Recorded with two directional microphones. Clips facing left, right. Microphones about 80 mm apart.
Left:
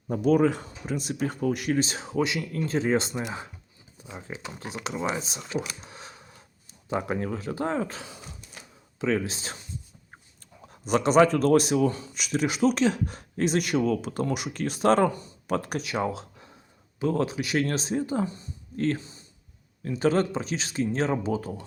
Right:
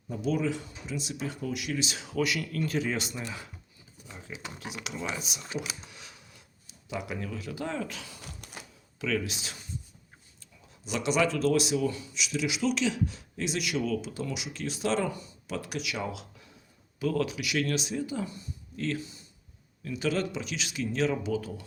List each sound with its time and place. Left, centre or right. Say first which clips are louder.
0.1 s speech: left 8 dB; left
5.8 s a sound: left 5 dB; left
9.0 s speech: left 4 dB; left
10.7 s speech: left 7 dB; left